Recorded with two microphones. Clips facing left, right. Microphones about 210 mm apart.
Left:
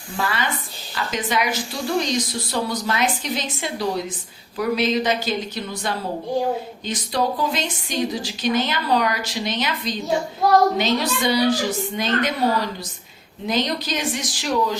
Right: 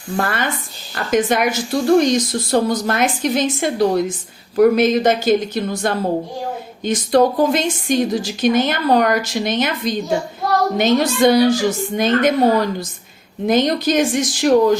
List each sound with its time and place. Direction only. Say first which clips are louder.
0.2 s speech: right 3 dB; 50° right (ahead or behind)